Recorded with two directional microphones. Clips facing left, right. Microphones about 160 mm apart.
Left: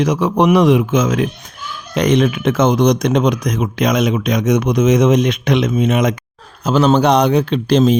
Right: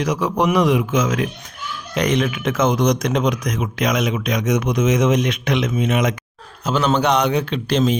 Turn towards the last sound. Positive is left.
turn(degrees=35)  # may be behind; listen again after turning